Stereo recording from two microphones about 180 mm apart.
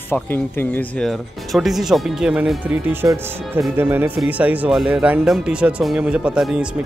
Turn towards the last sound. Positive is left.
turn(degrees=-5)  # may be behind; listen again after turning